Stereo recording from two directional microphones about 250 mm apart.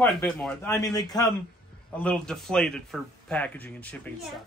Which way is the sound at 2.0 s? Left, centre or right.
Centre.